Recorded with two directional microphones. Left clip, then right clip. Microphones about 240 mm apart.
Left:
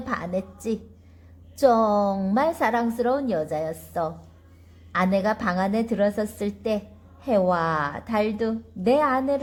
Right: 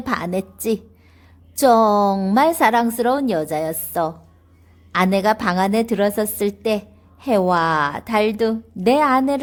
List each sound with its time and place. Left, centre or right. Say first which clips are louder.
0.0 s a woman's voice: right 5 dB; right